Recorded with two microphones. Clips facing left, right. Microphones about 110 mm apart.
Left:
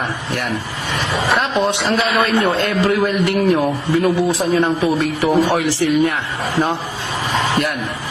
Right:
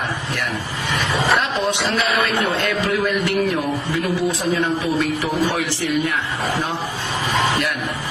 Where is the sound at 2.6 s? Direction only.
40° left (ahead or behind).